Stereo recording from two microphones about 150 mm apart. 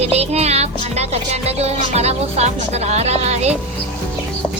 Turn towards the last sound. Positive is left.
turn(degrees=-45)  # may be behind; listen again after turning